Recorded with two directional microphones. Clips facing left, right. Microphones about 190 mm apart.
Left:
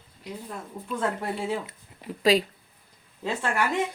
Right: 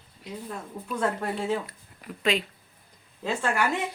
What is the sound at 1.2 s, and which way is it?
Speech, 10° left (ahead or behind).